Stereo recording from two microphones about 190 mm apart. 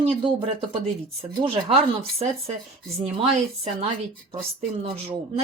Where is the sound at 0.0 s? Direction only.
25° right (ahead or behind).